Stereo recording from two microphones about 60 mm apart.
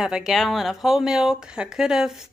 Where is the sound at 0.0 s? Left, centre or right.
Centre.